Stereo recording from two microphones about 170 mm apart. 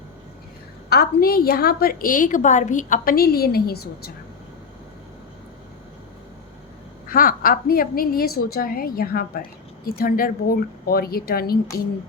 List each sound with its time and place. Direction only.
0.9 s a woman's voice: 65° left (ahead or behind)
7.1 s a woman's voice: 55° left (ahead or behind)